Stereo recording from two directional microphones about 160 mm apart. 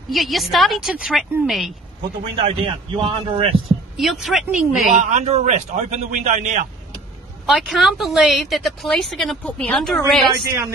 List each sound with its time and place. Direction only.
0.1 s a woman's voice: centre (ahead or behind)
2.3 s a man's voice: 35° right (ahead or behind)
3.9 s a woman's voice: centre (ahead or behind)
4.9 s a man's voice: 45° right (ahead or behind)
7.4 s a woman's voice: centre (ahead or behind)